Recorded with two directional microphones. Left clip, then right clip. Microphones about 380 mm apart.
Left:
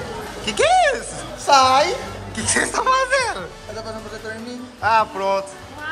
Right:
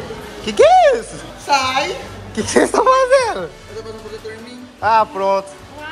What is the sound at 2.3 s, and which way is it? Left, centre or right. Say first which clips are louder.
Speech: right 6 dB; centre.